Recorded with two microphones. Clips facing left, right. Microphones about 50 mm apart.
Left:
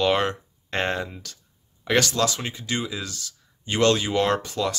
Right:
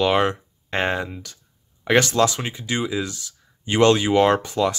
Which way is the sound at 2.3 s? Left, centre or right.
Centre.